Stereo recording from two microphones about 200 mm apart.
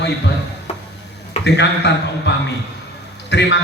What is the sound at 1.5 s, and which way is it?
A man's voice, 60° left (ahead or behind).